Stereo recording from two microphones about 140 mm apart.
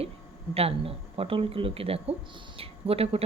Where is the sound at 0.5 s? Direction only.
45° right (ahead or behind).